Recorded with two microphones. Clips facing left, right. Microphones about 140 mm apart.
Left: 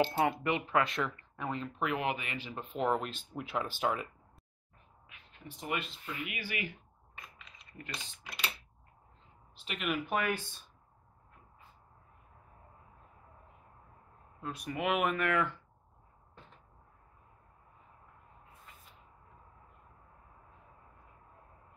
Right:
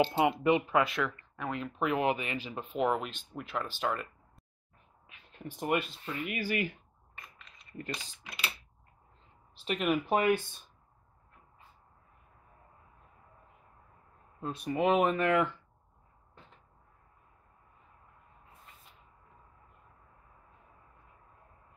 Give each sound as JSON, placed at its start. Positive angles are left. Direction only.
{"t": 0.0, "sound": "speech", "side_deg": -20}
{"t": 0.8, "sound": "speech", "side_deg": 0}
{"t": 1.6, "sound": "speech", "side_deg": -25}
{"t": 2.3, "sound": "speech", "side_deg": -15}
{"t": 2.9, "sound": "speech", "side_deg": 0}
{"t": 5.6, "sound": "speech", "side_deg": -50}
{"t": 7.2, "sound": "mechanisms", "side_deg": 0}
{"t": 7.8, "sound": "speech", "side_deg": -35}
{"t": 9.7, "sound": "speech", "side_deg": -40}
{"t": 10.1, "sound": "speech", "side_deg": -25}
{"t": 14.4, "sound": "speech", "side_deg": -25}